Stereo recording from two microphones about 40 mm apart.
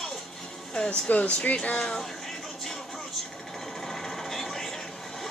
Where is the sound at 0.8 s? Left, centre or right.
Left.